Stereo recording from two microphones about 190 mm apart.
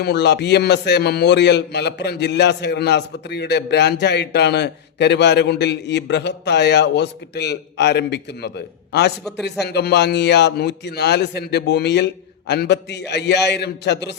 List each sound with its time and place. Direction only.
0.0 s a man's voice: 65° left (ahead or behind)